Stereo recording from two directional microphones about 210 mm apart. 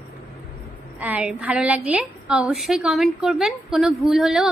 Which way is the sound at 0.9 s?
5° right (ahead or behind).